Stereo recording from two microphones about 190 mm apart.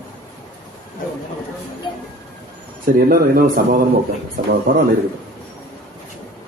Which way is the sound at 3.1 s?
45° right (ahead or behind).